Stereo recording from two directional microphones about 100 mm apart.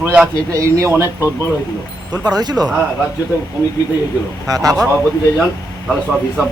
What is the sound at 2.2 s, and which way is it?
Speech, 45° right (ahead or behind).